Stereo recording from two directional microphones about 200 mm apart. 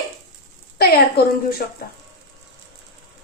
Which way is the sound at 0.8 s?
50° left (ahead or behind).